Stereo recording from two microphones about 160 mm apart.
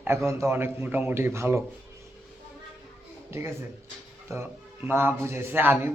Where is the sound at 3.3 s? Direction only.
15° right (ahead or behind).